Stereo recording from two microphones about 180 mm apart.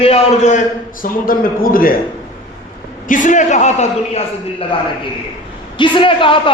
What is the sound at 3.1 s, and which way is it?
A man's voice, 45° left (ahead or behind).